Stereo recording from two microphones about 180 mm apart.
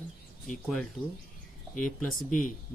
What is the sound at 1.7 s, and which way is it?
Speech, 45° left (ahead or behind).